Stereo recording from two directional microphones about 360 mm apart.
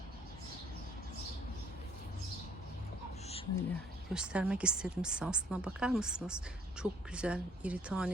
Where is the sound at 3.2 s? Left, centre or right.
Centre.